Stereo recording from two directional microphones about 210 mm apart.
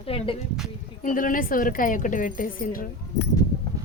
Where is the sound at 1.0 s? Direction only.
40° left (ahead or behind).